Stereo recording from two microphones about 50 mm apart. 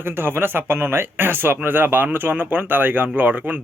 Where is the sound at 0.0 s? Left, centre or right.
Right.